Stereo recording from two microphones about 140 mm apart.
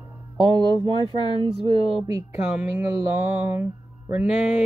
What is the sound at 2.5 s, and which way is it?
Speech, 10° right (ahead or behind).